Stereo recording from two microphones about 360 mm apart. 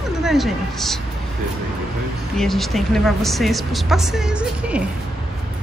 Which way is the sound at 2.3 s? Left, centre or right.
Centre.